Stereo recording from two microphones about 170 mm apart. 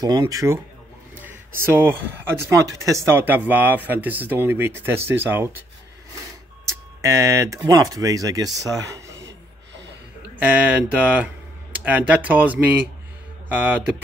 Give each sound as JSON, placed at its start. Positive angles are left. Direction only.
{"t": 0.0, "sound": "speech", "side_deg": -20}
{"t": 6.6, "sound": "speech", "side_deg": -15}
{"t": 10.4, "sound": "speech", "side_deg": -10}
{"t": 11.7, "sound": "a sound", "side_deg": -10}
{"t": 12.2, "sound": "speech", "side_deg": -10}